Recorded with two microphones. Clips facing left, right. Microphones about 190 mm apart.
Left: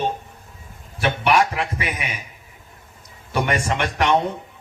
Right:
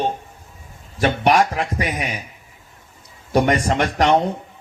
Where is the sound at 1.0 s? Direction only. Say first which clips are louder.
Right 3 dB; 40° right (ahead or behind).